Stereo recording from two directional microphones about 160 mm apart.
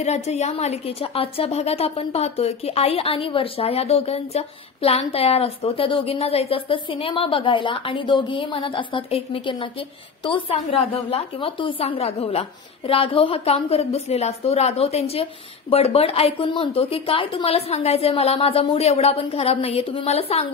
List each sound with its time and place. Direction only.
0.0 s a woman's voice: 45° left (ahead or behind)